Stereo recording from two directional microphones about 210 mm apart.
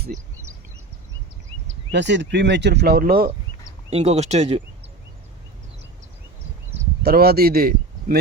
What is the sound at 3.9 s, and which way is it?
Speech, 30° right (ahead or behind).